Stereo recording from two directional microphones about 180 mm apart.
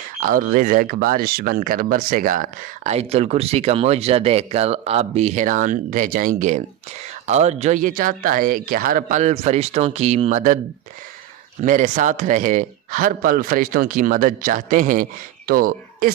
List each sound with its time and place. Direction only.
0.2 s speech: 50° right (ahead or behind)
11.6 s speech: 45° right (ahead or behind)